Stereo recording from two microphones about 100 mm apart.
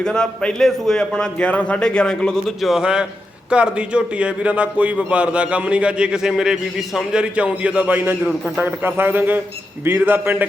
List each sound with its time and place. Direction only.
0.0 s a man's voice: 5° left (ahead or behind); by 10.4 s 15° right (ahead or behind)